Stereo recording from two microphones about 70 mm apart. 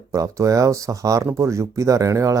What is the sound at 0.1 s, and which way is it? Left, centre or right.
Speech, right.